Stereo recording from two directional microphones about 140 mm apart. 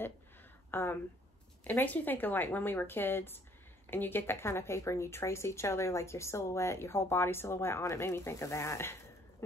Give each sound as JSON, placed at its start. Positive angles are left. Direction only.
{"t": 0.7, "sound": "a woman's voice", "side_deg": 15}